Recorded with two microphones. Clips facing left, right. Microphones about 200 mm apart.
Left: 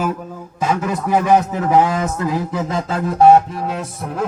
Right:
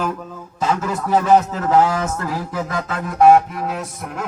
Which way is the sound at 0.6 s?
15° left (ahead or behind).